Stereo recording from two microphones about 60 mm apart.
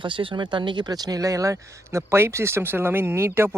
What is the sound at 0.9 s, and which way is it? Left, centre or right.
Speech, right.